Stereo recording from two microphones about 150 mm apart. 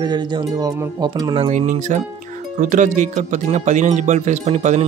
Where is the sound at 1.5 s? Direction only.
55° right (ahead or behind).